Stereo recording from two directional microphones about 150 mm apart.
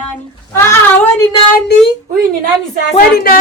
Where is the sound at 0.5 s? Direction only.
15° left (ahead or behind).